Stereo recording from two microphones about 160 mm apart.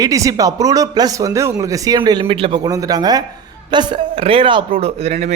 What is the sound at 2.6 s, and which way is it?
A man's voice, 20° right (ahead or behind).